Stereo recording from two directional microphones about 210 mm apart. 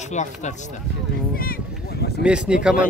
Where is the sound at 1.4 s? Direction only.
45° left (ahead or behind).